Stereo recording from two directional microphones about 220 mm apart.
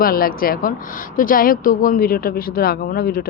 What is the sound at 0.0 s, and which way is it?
Speech, 40° left (ahead or behind).